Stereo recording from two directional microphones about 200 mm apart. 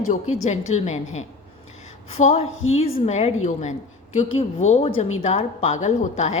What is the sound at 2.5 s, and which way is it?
Speech, 90° left.